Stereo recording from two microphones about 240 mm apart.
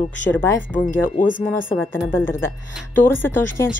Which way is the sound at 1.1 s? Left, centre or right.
Left.